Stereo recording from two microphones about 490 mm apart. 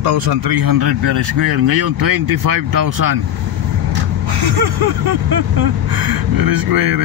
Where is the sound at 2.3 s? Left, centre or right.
Right.